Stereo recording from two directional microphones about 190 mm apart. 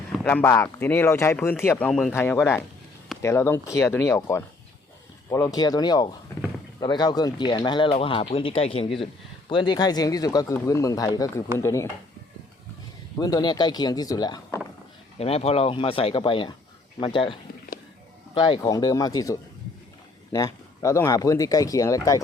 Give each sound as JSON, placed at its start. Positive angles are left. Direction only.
{"t": 0.3, "sound": "speech", "side_deg": 10}
{"t": 13.1, "sound": "speech", "side_deg": 20}
{"t": 15.2, "sound": "speech", "side_deg": 30}
{"t": 18.3, "sound": "speech", "side_deg": 25}